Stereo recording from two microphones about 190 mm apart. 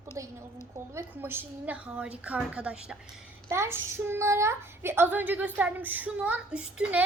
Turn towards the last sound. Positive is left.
turn(degrees=-5)  # may be behind; listen again after turning